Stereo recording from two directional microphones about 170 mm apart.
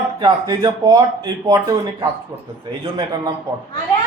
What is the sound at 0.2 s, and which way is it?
Speech, 25° right (ahead or behind).